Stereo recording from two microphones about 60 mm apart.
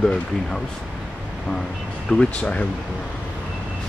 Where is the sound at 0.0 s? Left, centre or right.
Centre.